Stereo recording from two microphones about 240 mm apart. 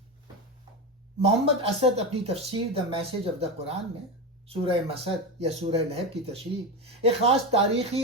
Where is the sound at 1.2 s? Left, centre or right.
Right.